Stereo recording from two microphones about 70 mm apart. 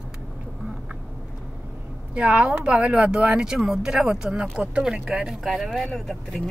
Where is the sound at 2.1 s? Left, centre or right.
Centre.